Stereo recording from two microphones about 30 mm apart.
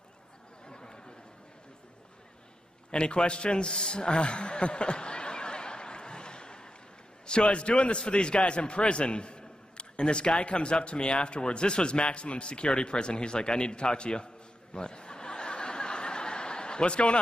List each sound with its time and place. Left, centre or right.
0.7 s chatter: left
2.9 s a sound: left
7.2 s a man's voice: left
14.7 s snicker: left